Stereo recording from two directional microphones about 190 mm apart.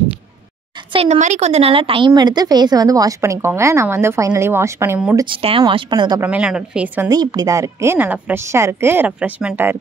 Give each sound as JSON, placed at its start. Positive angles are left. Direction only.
{"t": 0.9, "sound": "a woman's voice", "side_deg": -35}
{"t": 5.2, "sound": "a woman's voice", "side_deg": -30}
{"t": 6.2, "sound": "a woman's voice", "side_deg": -5}
{"t": 7.1, "sound": "a woman's voice", "side_deg": -20}